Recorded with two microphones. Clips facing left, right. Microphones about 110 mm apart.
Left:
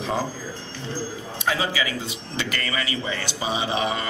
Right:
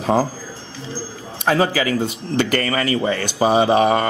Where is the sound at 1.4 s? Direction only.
50° right (ahead or behind).